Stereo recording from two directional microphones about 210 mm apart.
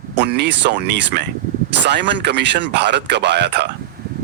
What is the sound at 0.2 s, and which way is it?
Speech, 55° right (ahead or behind).